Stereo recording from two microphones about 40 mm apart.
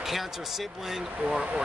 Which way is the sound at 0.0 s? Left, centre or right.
Centre.